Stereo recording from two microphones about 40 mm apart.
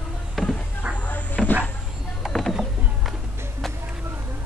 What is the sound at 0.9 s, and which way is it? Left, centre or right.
Cupboard open or close, left.